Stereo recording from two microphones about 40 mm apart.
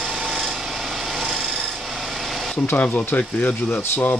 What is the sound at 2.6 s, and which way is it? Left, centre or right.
Speech, left.